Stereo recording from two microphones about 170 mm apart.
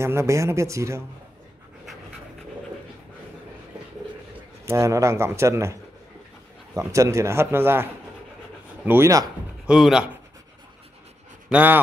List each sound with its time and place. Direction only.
0.0 s speech: 15° right (ahead or behind)
4.6 s speech: 15° right (ahead or behind)
6.9 s speech: 20° right (ahead or behind)
9.7 s speech: 5° right (ahead or behind)
11.4 s speech: 10° right (ahead or behind)